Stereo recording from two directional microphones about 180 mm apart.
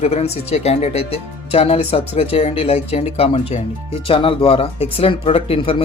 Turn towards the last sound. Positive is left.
turn(degrees=30)  # may be behind; listen again after turning